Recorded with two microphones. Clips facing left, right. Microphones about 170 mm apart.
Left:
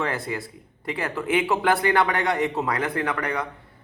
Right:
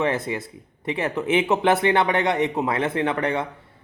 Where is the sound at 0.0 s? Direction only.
20° right (ahead or behind).